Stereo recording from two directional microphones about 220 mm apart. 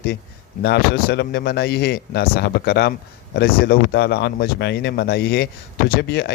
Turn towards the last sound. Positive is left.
turn(degrees=50)  # may be behind; listen again after turning